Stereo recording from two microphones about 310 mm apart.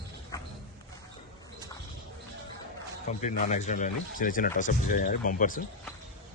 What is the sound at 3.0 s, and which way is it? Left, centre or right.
Speech, left.